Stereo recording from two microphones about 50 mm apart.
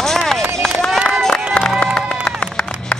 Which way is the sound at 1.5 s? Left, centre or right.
Left.